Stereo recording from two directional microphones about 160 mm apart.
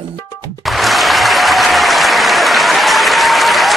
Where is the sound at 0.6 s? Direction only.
Centre (ahead or behind).